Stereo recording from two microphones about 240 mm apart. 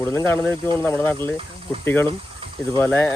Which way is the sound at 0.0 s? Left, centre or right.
Centre.